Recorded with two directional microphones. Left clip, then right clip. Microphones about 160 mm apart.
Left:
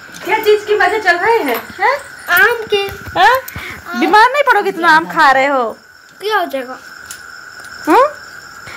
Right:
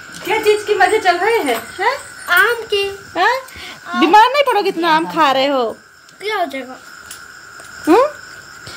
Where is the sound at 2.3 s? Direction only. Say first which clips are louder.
Left 2 dB; 30° right (ahead or behind).